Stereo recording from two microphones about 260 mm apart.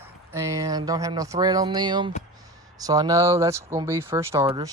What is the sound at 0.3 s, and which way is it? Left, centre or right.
Speech, centre.